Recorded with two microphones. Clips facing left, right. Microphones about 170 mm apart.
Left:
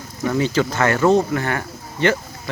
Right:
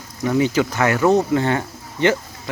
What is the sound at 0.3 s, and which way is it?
Speech, 15° right (ahead or behind).